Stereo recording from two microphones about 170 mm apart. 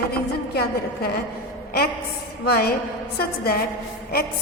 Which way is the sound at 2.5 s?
70° left (ahead or behind).